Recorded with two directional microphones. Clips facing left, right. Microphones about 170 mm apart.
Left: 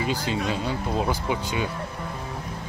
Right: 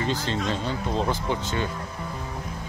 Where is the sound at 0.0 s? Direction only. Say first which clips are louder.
Left 1 dB; 10° left (ahead or behind).